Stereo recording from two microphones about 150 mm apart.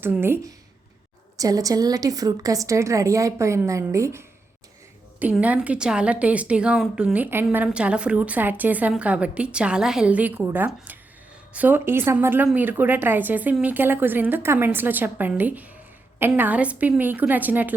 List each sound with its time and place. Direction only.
0.0 s a woman's voice: 15° right (ahead or behind)